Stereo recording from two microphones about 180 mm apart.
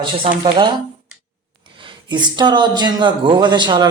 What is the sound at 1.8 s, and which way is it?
Speech, 25° right (ahead or behind).